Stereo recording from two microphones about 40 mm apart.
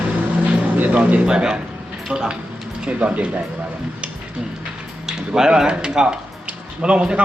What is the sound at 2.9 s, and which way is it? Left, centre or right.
Speech, right.